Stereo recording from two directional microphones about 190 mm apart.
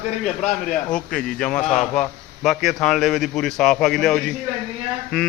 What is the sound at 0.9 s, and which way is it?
A man's voice, 5° left (ahead or behind).